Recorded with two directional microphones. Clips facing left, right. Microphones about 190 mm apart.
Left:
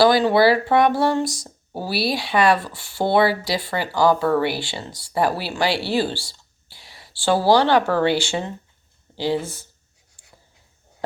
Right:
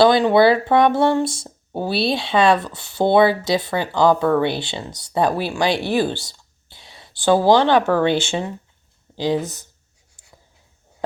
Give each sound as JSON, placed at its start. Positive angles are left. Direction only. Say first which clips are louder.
{"t": 0.0, "sound": "speech", "louder": "right 2 dB", "side_deg": -20}